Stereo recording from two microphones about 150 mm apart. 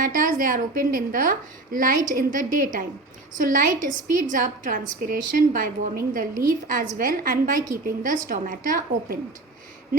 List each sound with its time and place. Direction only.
0.1 s a woman's voice: 65° right (ahead or behind)